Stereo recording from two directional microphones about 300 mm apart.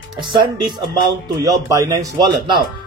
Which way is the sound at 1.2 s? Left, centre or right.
Centre.